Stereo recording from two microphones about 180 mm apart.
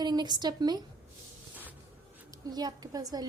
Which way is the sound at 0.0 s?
25° right (ahead or behind).